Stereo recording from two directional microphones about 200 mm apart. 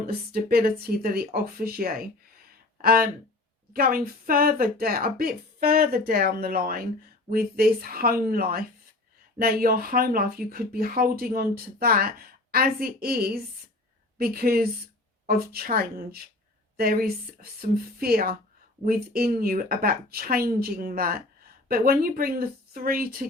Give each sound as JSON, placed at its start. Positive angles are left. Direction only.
{"t": 0.3, "sound": "speech", "side_deg": -50}